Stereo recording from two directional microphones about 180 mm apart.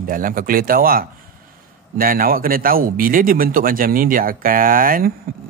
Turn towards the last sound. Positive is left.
turn(degrees=-50)  # may be behind; listen again after turning